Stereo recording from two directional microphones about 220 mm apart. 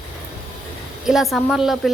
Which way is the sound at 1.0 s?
Centre (ahead or behind).